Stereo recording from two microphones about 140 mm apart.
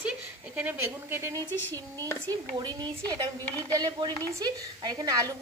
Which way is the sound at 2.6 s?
30° right (ahead or behind).